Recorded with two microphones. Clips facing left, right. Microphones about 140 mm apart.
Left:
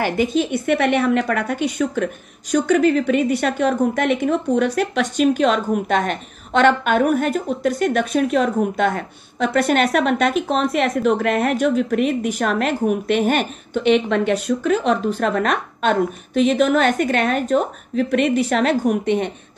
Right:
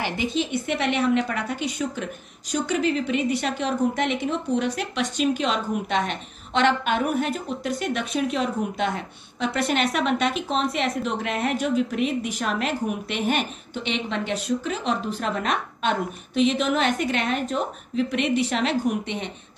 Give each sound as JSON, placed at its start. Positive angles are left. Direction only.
{"t": 0.0, "sound": "a woman's voice", "side_deg": 50}